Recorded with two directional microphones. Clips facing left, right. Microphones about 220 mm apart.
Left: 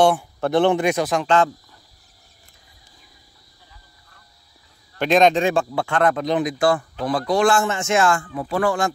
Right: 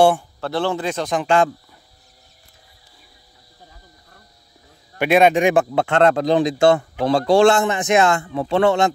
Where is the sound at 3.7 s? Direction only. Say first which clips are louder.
Right 5 dB; 40° right (ahead or behind).